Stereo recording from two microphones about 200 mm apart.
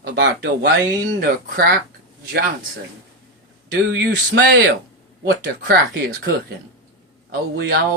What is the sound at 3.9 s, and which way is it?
Speech, 60° right (ahead or behind).